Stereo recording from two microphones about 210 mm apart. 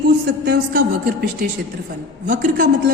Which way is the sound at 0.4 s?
45° right (ahead or behind).